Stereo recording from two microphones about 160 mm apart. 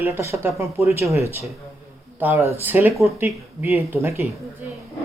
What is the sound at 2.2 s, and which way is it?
Speech, 15° right (ahead or behind).